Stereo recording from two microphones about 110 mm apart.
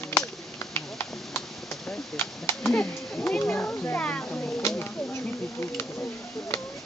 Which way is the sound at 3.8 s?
10° left (ahead or behind).